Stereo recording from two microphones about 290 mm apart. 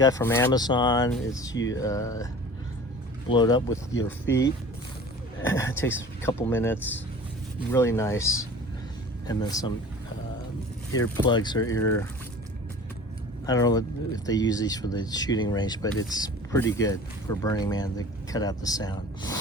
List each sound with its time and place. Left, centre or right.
0.0 s speech: centre
3.2 s speech: centre
5.4 s speech: centre
10.9 s speech: centre
13.4 s speech: centre